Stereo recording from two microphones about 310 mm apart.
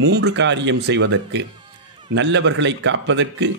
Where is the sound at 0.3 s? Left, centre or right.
Right.